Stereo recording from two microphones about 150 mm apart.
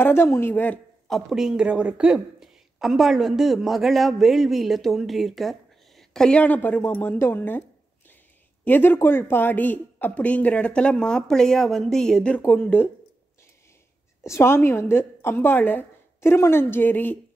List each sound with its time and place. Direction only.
0.0 s speech: 15° left (ahead or behind)
8.6 s a woman's voice: 15° left (ahead or behind)
14.2 s a woman's voice: 15° left (ahead or behind)